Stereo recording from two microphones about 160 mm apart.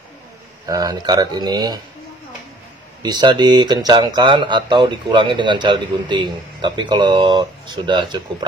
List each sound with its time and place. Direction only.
0.7 s speech: 25° right (ahead or behind)
3.0 s speech: 25° right (ahead or behind)